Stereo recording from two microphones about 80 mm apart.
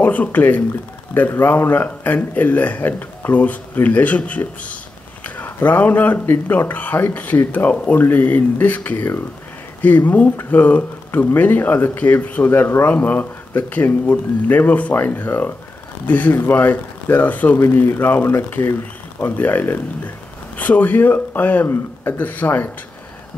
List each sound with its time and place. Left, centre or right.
0.0 s speech: centre